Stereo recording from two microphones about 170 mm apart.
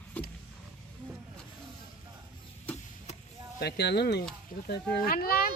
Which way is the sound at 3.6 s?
75° left (ahead or behind).